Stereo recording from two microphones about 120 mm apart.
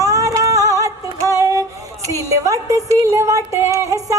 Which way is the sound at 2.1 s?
25° right (ahead or behind).